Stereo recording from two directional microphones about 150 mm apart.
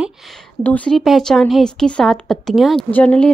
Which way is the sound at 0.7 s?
5° left (ahead or behind).